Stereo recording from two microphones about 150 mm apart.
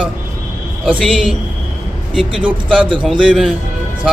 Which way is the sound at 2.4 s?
35° right (ahead or behind).